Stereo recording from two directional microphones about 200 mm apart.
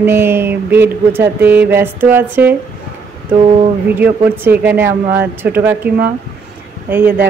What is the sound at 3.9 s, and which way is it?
A woman's voice, 10° right (ahead or behind).